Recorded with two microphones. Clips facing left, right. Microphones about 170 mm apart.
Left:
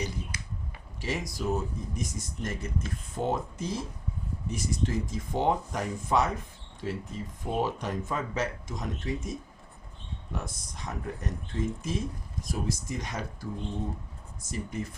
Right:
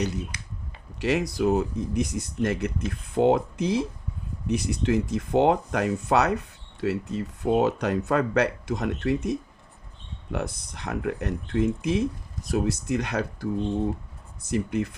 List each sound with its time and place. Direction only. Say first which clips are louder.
0.9 s speech: right 9 dB; 65° right (ahead or behind)
14.5 s speech: right 9 dB; 65° right (ahead or behind)